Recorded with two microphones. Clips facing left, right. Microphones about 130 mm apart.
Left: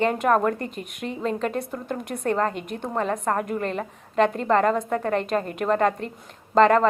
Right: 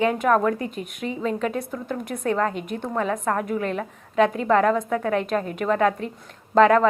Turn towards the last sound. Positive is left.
turn(degrees=0)  # may be behind; listen again after turning